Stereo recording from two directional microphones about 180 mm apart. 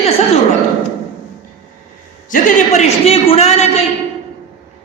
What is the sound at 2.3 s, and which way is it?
A woman's voice, 45° left (ahead or behind).